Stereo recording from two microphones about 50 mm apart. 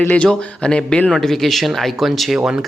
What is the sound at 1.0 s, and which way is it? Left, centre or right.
Speech, centre.